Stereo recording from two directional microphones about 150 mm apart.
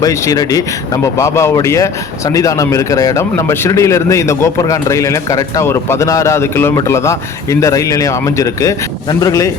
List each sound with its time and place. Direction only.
0.0 s a man's voice: 25° left (ahead or behind)